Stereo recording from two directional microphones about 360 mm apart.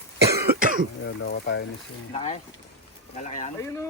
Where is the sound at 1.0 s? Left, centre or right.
Left.